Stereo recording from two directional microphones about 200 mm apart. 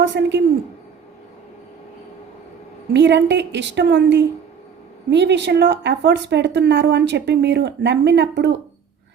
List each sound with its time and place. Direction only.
0.0 s speech: 60° right (ahead or behind)
2.9 s speech: 60° right (ahead or behind)